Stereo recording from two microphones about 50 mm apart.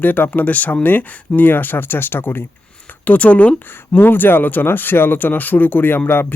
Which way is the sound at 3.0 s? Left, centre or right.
Left.